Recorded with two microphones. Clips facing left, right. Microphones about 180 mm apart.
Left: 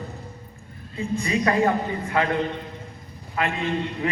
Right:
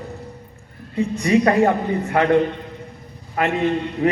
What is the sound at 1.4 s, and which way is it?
Speech, 60° right (ahead or behind).